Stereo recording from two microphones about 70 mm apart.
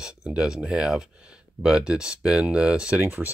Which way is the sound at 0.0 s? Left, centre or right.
Centre.